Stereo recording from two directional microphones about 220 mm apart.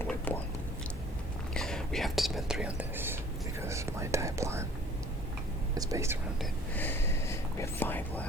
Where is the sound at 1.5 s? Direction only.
Centre (ahead or behind).